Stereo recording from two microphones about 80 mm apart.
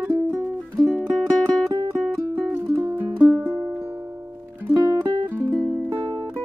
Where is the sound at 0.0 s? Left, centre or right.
Right.